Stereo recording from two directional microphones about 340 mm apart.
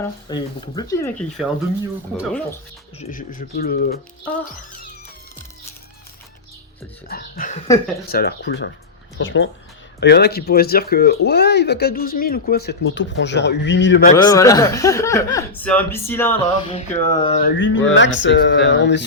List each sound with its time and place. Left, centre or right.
0.0 s speech: centre
3.0 s speech: left
7.1 s speech: left
14.1 s speech: centre
17.6 s speech: left